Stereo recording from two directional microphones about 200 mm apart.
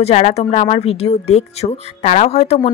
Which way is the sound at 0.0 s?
30° left (ahead or behind).